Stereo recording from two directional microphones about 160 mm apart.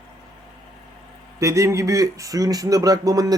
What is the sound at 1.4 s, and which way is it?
Speech, 20° right (ahead or behind).